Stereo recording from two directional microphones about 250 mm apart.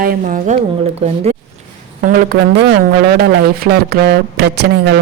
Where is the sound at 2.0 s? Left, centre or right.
Right.